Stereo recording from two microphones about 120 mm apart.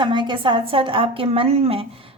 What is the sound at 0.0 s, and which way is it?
A woman's voice, 40° right (ahead or behind).